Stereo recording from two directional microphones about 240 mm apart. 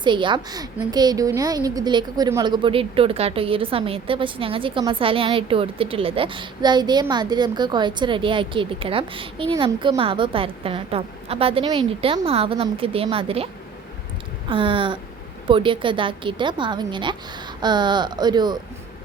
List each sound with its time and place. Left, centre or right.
0.0 s a woman's voice: centre
14.5 s a woman's voice: right